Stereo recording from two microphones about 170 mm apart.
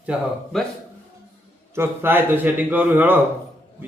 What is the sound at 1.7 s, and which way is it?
Speech, 15° right (ahead or behind).